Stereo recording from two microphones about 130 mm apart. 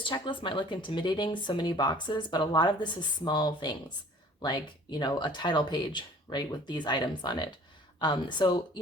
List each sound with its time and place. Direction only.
0.0 s speech: 40° left (ahead or behind)